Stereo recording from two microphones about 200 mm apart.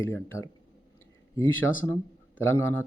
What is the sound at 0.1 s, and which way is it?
Speech, 15° left (ahead or behind).